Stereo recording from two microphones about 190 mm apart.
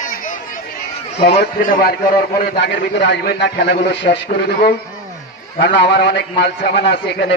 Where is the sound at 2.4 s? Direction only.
65° left (ahead or behind).